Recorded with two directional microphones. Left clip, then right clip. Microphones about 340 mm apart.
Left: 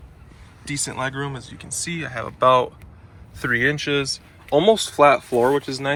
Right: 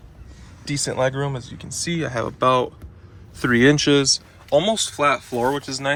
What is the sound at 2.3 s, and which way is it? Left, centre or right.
Speech, centre.